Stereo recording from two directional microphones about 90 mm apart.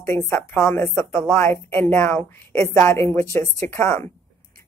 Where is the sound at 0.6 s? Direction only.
30° left (ahead or behind).